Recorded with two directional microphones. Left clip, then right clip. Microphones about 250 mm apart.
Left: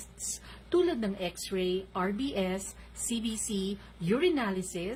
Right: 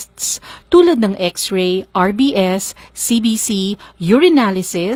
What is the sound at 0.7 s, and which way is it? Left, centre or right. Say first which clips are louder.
Speech: right 18 dB; right.